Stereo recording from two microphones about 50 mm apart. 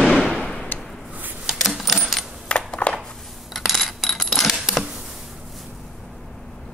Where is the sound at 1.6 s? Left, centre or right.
Centre.